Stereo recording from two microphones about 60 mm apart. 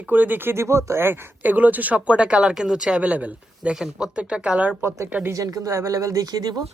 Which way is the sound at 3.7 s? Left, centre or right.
Centre.